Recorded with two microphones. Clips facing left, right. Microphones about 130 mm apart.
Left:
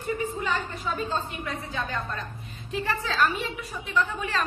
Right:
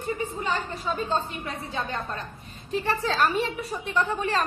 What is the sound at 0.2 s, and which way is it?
A woman's voice, 30° right (ahead or behind).